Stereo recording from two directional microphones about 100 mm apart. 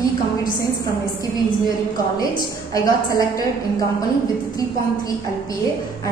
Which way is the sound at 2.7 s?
35° left (ahead or behind).